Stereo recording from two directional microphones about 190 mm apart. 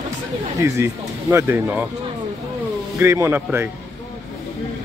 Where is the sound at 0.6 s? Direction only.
15° right (ahead or behind).